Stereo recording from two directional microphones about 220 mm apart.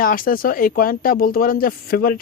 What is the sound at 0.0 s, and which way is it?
Speech, 40° left (ahead or behind).